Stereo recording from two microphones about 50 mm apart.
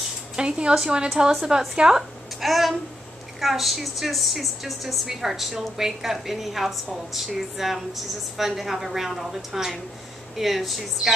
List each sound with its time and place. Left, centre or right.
0.4 s a woman's voice: centre
2.4 s a woman's voice: centre